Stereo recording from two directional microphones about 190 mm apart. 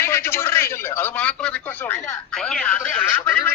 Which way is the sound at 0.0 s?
10° left (ahead or behind).